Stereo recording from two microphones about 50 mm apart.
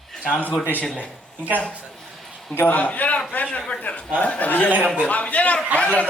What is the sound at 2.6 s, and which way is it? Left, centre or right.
A man's voice, left.